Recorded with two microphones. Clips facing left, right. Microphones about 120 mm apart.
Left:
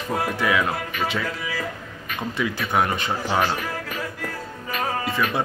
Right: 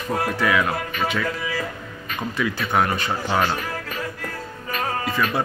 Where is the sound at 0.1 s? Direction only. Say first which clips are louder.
Right 1 dB; 10° left (ahead or behind).